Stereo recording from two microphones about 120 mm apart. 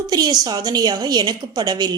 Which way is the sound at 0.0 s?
35° right (ahead or behind).